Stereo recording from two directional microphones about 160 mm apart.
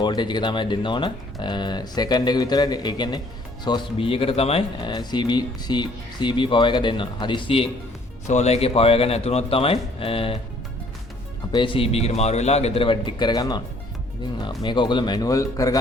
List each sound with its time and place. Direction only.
0.0 s speech: 30° left (ahead or behind)
11.5 s speech: 30° left (ahead or behind)